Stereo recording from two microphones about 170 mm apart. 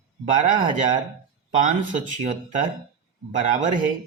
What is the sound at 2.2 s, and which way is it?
Speech, 45° right (ahead or behind).